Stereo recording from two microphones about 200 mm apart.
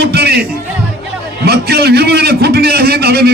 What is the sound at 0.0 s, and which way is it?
Music, 50° right (ahead or behind).